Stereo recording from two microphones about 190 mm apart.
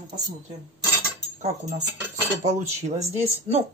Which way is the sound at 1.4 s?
40° right (ahead or behind).